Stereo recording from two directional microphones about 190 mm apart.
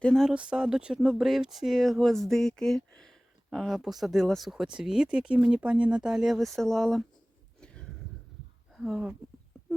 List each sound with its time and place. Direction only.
0.0 s speech: centre (ahead or behind)
8.7 s speech: centre (ahead or behind)